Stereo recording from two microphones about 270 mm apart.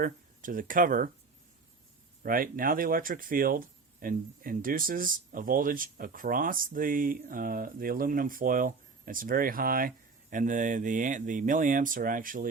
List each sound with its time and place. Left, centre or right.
0.0 s speech: right
2.2 s speech: right